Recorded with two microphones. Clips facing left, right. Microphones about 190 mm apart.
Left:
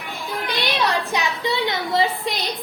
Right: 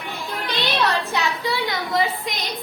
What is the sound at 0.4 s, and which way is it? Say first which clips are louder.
Music: even; 10° left (ahead or behind).